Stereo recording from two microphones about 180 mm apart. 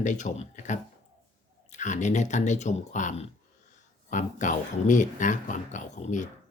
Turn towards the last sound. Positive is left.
turn(degrees=40)  # may be behind; listen again after turning